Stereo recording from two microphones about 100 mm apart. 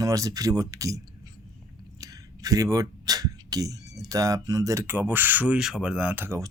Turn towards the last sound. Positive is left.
turn(degrees=-20)  # may be behind; listen again after turning